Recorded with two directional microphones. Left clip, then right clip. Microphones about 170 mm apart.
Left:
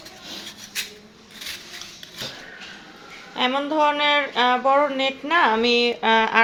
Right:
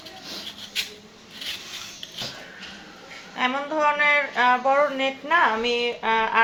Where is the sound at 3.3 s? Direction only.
40° left (ahead or behind).